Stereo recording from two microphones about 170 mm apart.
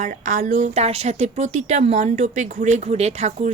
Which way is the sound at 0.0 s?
45° right (ahead or behind).